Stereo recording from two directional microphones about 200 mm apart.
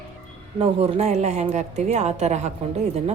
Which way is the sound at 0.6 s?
30° right (ahead or behind).